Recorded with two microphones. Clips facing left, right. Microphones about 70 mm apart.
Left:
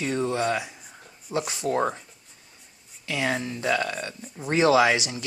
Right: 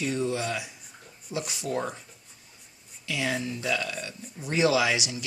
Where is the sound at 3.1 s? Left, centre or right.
Left.